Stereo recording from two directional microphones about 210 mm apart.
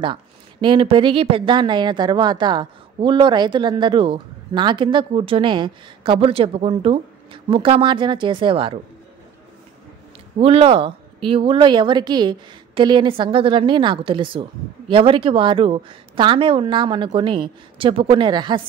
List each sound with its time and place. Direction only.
0.0 s speech: 25° right (ahead or behind)
10.4 s speech: 25° right (ahead or behind)